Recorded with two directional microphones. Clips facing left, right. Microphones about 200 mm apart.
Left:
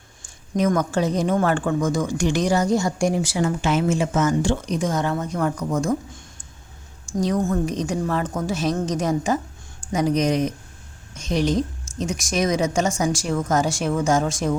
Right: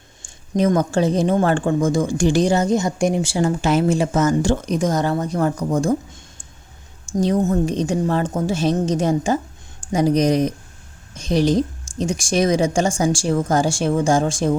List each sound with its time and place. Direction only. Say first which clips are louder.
0.2 s a woman's voice: right 3 dB; 30° right (ahead or behind)